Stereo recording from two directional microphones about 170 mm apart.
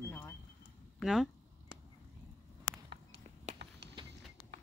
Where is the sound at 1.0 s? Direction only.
Centre (ahead or behind).